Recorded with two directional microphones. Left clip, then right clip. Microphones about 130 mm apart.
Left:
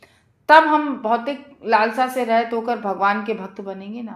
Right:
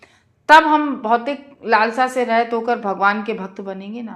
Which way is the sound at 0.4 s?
40° right (ahead or behind).